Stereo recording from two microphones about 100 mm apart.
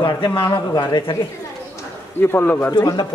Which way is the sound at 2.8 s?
50° left (ahead or behind).